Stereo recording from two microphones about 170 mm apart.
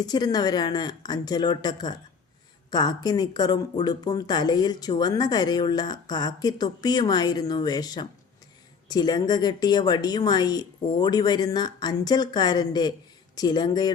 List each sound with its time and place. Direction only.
0.0 s speech: 25° left (ahead or behind)